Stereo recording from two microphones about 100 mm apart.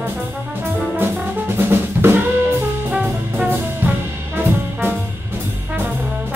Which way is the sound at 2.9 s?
15° right (ahead or behind).